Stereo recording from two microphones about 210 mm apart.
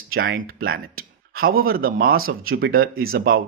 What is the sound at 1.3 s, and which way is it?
Speech, 45° right (ahead or behind).